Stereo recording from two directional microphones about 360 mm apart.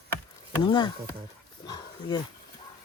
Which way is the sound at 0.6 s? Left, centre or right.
Centre.